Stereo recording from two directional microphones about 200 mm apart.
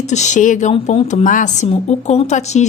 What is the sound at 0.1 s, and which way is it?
A woman's voice, 35° left (ahead or behind).